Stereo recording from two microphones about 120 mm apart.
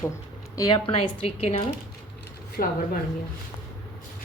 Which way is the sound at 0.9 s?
55° left (ahead or behind).